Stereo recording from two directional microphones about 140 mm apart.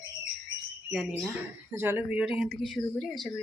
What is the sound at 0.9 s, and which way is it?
Speech, centre (ahead or behind).